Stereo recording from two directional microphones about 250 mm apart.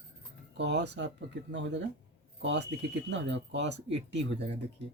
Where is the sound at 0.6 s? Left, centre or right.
Right.